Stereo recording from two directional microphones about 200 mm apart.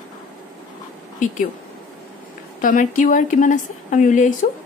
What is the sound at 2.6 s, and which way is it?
A woman's voice, 40° left (ahead or behind).